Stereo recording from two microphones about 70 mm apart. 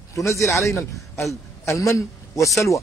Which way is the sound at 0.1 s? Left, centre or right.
Left.